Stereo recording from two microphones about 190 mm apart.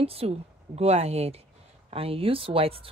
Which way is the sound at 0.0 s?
30° right (ahead or behind).